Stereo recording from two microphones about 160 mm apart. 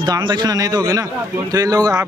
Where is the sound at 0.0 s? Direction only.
25° right (ahead or behind).